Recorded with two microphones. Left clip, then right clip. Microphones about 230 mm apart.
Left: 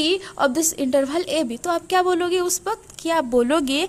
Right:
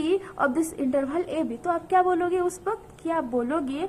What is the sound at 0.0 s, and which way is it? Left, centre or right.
A woman's voice, left.